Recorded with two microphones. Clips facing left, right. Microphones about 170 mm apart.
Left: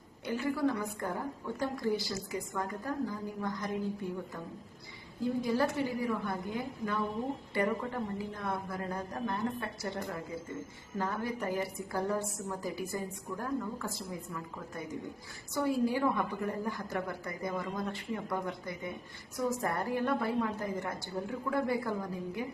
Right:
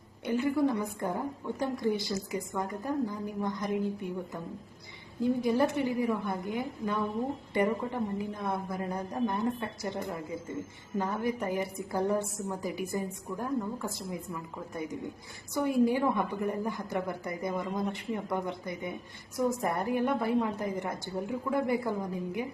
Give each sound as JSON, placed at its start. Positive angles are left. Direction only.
{"t": 0.3, "sound": "a woman's voice", "side_deg": -20}
{"t": 5.2, "sound": "a woman's voice", "side_deg": -20}
{"t": 15.5, "sound": "a woman's voice", "side_deg": -20}